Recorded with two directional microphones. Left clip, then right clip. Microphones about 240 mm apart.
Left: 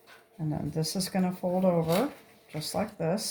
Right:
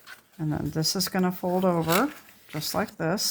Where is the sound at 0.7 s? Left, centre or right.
Right.